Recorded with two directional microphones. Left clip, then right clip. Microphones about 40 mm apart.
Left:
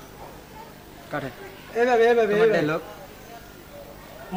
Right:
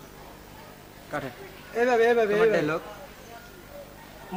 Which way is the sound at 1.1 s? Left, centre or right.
Right.